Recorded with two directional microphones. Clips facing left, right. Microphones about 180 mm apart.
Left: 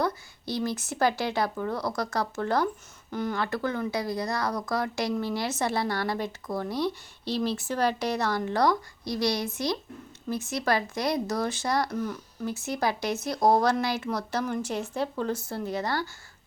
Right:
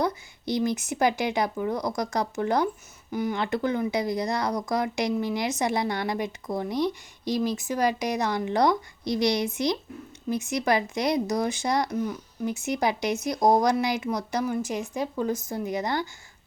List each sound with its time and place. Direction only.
0.0 s speech: 20° right (ahead or behind)